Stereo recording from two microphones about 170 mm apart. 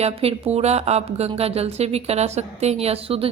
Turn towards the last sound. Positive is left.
turn(degrees=-35)  # may be behind; listen again after turning